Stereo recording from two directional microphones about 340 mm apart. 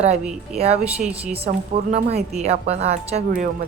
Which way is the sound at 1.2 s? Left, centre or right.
Centre.